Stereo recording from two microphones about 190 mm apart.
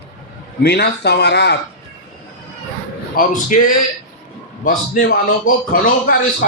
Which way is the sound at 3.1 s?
45° left (ahead or behind).